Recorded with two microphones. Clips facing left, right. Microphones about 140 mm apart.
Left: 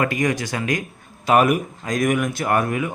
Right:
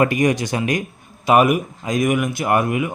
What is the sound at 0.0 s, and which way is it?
A man's voice, 20° right (ahead or behind).